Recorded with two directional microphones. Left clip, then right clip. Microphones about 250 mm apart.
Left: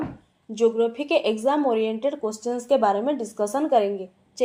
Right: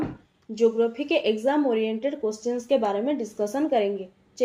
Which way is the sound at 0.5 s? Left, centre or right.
Left.